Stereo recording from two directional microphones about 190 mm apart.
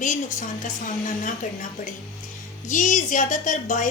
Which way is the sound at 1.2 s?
45° left (ahead or behind).